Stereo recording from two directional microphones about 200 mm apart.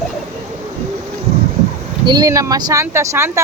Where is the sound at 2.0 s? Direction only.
20° right (ahead or behind).